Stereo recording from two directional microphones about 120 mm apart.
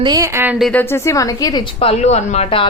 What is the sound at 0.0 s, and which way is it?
Speech, 35° right (ahead or behind).